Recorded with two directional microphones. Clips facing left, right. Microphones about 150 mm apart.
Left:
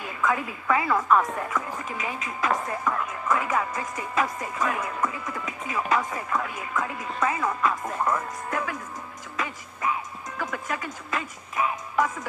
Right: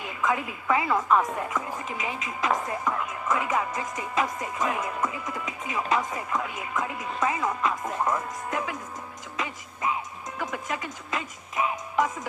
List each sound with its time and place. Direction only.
0.0 s a sound: 20° right (ahead or behind)
0.7 s speech: 25° right (ahead or behind)
9.4 s music: 20° right (ahead or behind)
10.4 s speech: 20° right (ahead or behind)